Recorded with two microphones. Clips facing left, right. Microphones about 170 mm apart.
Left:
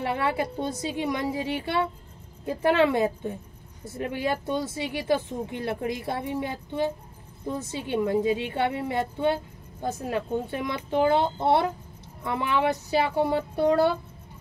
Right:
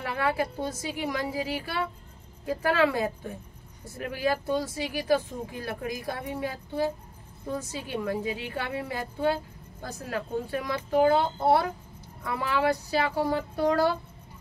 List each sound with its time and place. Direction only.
0.0 s a woman's voice: 25° left (ahead or behind)